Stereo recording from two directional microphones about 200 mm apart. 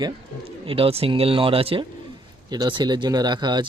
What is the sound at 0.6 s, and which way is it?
Speech, 25° right (ahead or behind).